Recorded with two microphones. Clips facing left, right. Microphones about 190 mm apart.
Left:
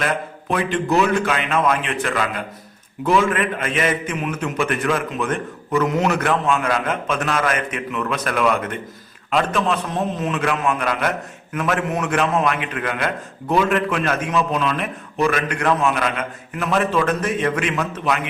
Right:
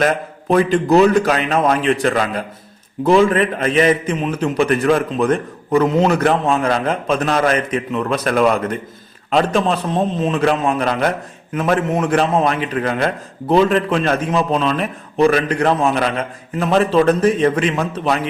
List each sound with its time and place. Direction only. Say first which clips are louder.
0.0 s a man's voice: right 6 dB; 40° right (ahead or behind)